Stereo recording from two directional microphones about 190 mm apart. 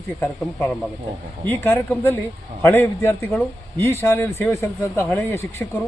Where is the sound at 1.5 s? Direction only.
10° left (ahead or behind).